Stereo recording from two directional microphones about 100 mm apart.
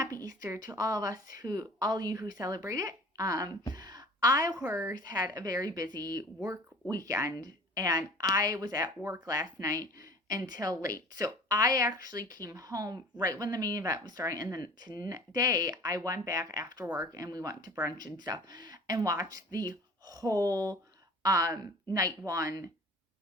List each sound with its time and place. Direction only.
0.3 s speech: 30° right (ahead or behind)
3.8 s a sound: 40° right (ahead or behind)
4.6 s speech: 25° right (ahead or behind)
6.4 s speech: 30° right (ahead or behind)